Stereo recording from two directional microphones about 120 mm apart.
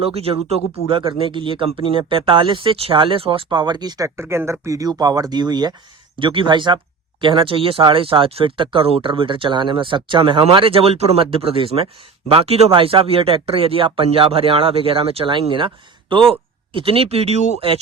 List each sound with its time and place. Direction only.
0.0 s speech: 55° right (ahead or behind)